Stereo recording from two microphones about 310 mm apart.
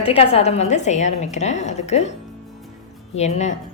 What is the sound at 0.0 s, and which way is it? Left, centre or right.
A woman's voice, centre.